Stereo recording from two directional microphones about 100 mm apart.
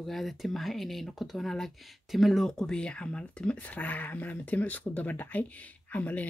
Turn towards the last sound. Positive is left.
turn(degrees=15)  # may be behind; listen again after turning